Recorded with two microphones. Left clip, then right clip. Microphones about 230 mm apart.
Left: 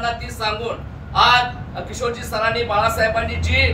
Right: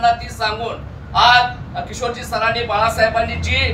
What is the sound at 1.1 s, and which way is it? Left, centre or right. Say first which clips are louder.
Speech: right 3 dB; centre.